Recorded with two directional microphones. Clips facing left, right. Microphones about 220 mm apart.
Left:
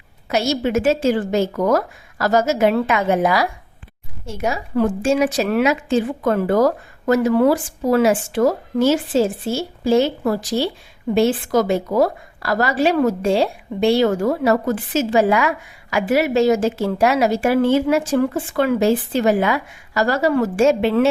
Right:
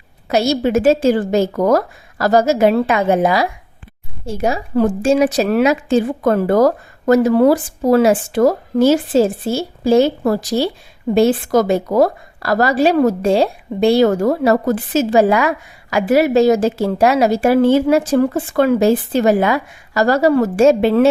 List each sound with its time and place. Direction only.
0.3 s a woman's voice: 35° right (ahead or behind)